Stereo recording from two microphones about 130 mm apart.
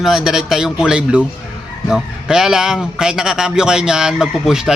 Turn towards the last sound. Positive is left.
turn(degrees=-5)  # may be behind; listen again after turning